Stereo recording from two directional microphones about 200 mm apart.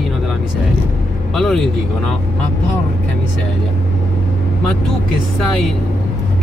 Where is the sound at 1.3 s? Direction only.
Centre (ahead or behind).